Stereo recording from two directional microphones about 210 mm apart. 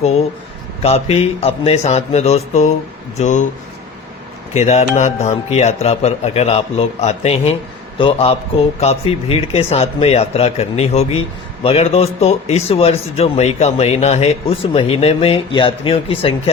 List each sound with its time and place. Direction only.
0.8 s a man's voice: 30° left (ahead or behind)
4.5 s a man's voice: 30° left (ahead or behind)